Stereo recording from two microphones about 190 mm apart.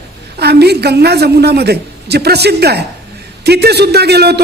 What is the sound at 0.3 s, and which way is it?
A man's voice, 60° right (ahead or behind).